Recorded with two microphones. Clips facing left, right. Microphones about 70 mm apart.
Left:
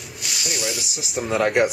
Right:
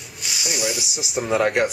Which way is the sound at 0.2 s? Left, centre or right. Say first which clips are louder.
Right 2 dB; centre.